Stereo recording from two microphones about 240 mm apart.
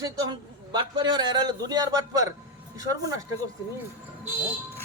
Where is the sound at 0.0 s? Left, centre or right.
Centre.